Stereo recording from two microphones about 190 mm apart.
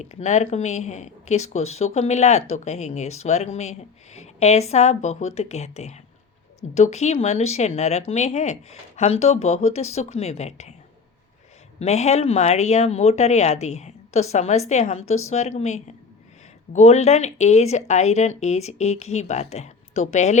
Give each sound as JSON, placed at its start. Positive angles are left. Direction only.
{"t": 0.0, "sound": "speech", "side_deg": 35}
{"t": 11.8, "sound": "speech", "side_deg": 35}